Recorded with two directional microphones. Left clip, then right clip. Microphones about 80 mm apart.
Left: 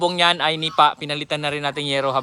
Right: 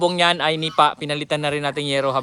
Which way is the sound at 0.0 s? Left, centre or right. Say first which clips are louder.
Even; left.